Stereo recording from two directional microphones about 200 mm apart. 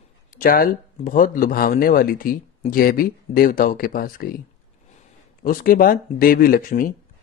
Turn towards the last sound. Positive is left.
turn(degrees=45)  # may be behind; listen again after turning